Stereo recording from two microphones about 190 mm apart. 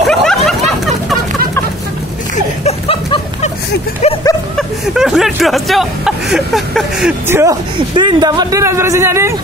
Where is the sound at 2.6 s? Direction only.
30° left (ahead or behind).